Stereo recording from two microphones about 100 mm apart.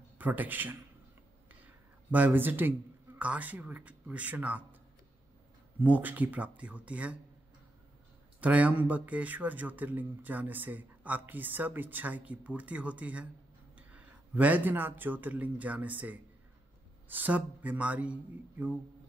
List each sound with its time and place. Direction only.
0.2 s a man's voice: 15° right (ahead or behind)
2.0 s a man's voice: 15° right (ahead or behind)
5.8 s a man's voice: 15° right (ahead or behind)
8.4 s a man's voice: 15° right (ahead or behind)